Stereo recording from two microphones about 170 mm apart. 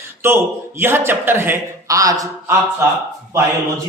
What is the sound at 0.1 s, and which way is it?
Speech, 15° right (ahead or behind).